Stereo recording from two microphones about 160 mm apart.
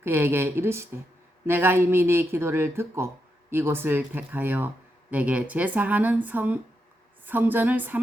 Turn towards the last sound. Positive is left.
turn(degrees=-10)  # may be behind; listen again after turning